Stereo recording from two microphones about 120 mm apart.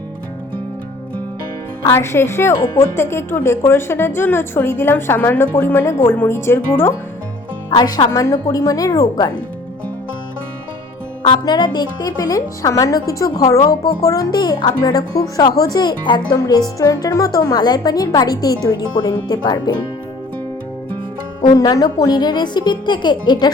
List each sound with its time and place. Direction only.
1.8 s a woman's voice: 20° left (ahead or behind)
7.7 s a woman's voice: 35° left (ahead or behind)
11.4 s speech: 40° left (ahead or behind)
21.4 s speech: 35° left (ahead or behind)